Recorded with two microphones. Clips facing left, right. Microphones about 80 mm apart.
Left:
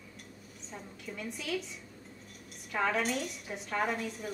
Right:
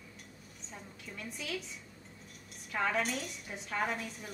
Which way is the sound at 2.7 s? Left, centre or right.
Centre.